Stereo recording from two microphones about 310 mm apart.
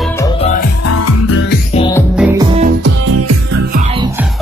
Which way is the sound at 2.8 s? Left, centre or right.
Right.